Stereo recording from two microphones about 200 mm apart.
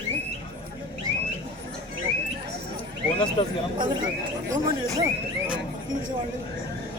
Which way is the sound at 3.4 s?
25° left (ahead or behind).